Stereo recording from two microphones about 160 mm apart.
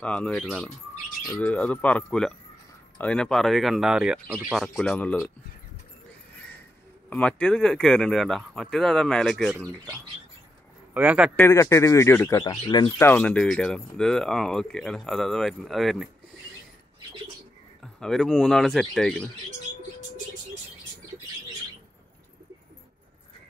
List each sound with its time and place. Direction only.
0.0 s speech: 5° left (ahead or behind)
7.1 s speech: 10° left (ahead or behind)
10.9 s a man's voice: 10° right (ahead or behind)
11.3 s speech: 15° left (ahead or behind)
12.9 s speech: 10° left (ahead or behind)
18.0 s speech: 5° left (ahead or behind)